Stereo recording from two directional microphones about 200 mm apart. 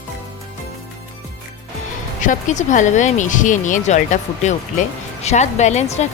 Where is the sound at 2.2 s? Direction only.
40° left (ahead or behind).